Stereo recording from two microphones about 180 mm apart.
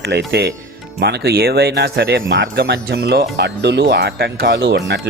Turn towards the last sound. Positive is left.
turn(degrees=-75)  # may be behind; listen again after turning